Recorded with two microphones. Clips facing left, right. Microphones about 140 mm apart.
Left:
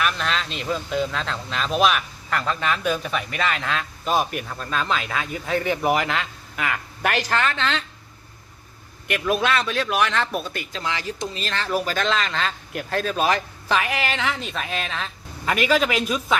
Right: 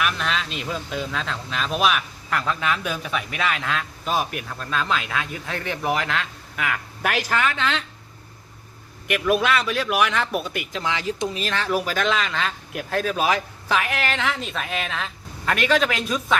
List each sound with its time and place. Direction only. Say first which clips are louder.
0.0 s speech: left 1 dB; 5° right (ahead or behind)
9.0 s speech: right 1 dB; 5° right (ahead or behind)